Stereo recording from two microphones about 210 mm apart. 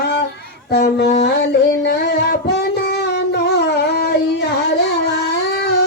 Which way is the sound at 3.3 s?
50° left (ahead or behind).